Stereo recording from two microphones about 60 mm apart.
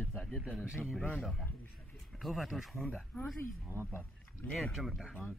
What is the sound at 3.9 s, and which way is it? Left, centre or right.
Speech, left.